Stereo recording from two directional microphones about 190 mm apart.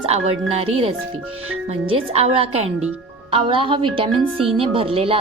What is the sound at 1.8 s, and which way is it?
A woman's voice, 30° right (ahead or behind).